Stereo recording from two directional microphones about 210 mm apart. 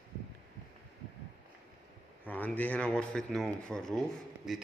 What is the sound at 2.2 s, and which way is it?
Speech, 10° left (ahead or behind).